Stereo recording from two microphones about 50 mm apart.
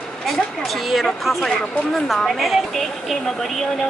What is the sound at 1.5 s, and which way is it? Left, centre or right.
Speech, left.